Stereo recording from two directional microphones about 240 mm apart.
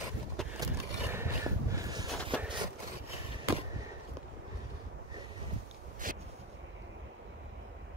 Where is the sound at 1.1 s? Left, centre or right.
Centre.